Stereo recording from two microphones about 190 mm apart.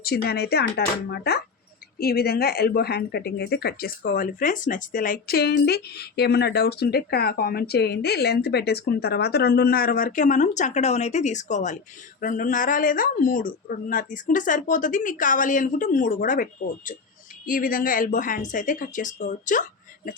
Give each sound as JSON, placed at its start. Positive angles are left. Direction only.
{"t": 0.0, "sound": "speech", "side_deg": 55}